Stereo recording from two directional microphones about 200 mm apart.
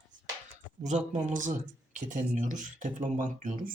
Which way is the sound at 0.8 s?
35° right (ahead or behind).